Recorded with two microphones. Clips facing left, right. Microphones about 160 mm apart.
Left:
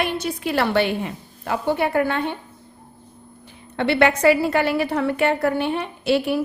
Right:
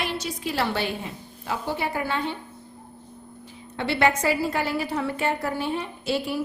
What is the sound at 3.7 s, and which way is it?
A woman's voice, 65° left (ahead or behind).